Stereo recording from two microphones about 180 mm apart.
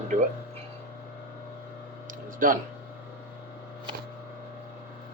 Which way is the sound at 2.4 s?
50° right (ahead or behind).